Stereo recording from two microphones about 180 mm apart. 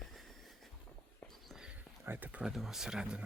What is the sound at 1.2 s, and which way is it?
Speech, centre (ahead or behind).